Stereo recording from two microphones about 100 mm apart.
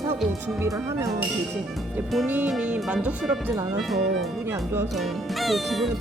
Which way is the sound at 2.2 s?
15° right (ahead or behind).